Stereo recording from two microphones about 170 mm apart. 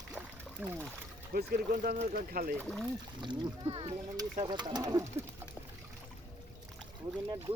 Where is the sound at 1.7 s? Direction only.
45° right (ahead or behind).